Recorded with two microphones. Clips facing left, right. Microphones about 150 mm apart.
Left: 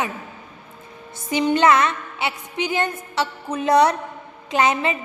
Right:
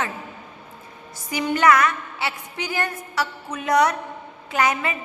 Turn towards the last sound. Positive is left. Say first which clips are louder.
# left 3 dB
turn(degrees=25)  # may be behind; listen again after turning